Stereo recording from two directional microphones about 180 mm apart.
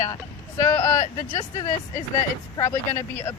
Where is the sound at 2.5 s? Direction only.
15° left (ahead or behind).